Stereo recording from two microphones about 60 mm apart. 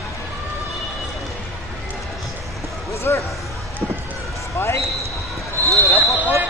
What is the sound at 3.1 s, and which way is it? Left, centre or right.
Speech, left.